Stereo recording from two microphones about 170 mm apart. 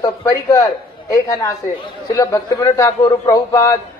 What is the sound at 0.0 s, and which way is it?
A man's voice, 20° left (ahead or behind).